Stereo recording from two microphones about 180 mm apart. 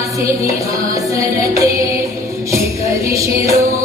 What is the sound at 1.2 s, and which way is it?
Music, 20° right (ahead or behind).